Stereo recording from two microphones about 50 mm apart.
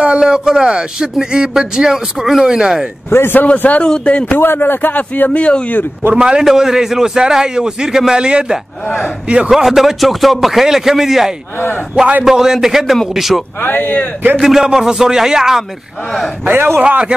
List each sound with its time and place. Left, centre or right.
0.0 s speech: centre
3.1 s a man's voice: left
3.3 s speech: left
4.4 s speech: left
5.4 s speech: left
6.1 s speech: centre
9.5 s a man's voice: centre
13.6 s speech: left
14.4 s speech: centre
16.4 s a man's voice: right